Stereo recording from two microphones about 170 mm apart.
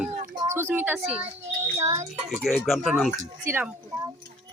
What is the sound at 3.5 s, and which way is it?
Speech, 15° right (ahead or behind).